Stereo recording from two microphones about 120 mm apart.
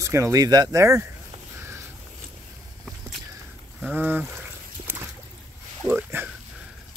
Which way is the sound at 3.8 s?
15° right (ahead or behind).